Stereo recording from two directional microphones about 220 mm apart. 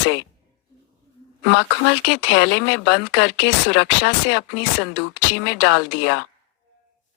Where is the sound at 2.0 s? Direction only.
55° left (ahead or behind).